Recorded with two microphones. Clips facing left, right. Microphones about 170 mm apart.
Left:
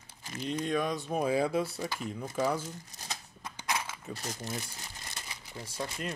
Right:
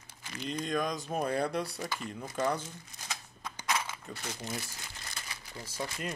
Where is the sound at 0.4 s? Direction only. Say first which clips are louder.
Left 2 dB; 5° left (ahead or behind).